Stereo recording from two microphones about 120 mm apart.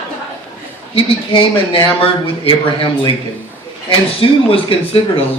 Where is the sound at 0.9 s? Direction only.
45° left (ahead or behind).